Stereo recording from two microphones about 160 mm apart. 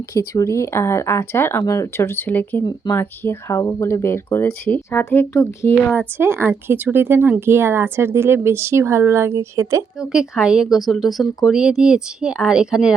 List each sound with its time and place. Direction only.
0.1 s speech: 20° left (ahead or behind)
6.1 s speech: 15° right (ahead or behind)
10.0 s speech: 5° right (ahead or behind)